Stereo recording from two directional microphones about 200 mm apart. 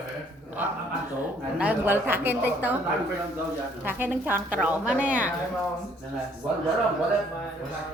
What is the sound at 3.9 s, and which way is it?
A woman's voice, 10° right (ahead or behind).